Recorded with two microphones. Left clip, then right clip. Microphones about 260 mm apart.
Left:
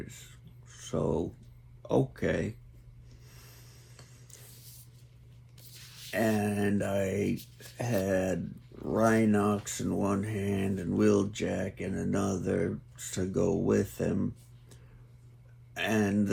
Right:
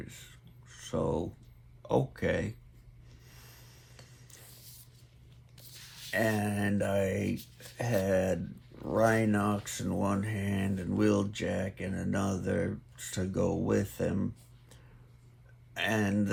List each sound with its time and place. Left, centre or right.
0.8 s speech: right
3.2 s a sound: right
5.5 s speech: right
15.7 s speech: right